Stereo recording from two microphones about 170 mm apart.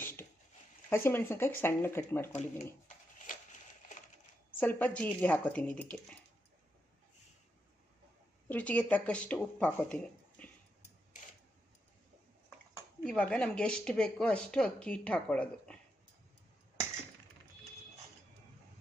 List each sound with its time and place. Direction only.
0.2 s a sound: 15° left (ahead or behind)
0.9 s speech: 10° left (ahead or behind)
3.2 s a sound: 45° left (ahead or behind)
4.6 s speech: 10° left (ahead or behind)
8.4 s speech: 10° left (ahead or behind)
13.0 s speech: 5° left (ahead or behind)